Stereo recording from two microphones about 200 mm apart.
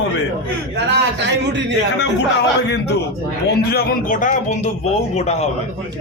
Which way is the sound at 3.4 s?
50° left (ahead or behind).